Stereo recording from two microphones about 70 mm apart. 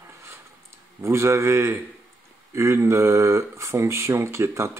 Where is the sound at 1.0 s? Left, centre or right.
Right.